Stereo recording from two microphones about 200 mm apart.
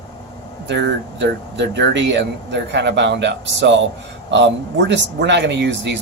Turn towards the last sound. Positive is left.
turn(degrees=-65)  # may be behind; listen again after turning